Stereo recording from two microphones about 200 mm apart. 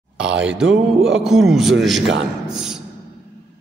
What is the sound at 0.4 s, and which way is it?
Speech, 5° right (ahead or behind).